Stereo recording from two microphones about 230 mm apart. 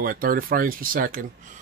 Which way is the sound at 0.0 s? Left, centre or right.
Right.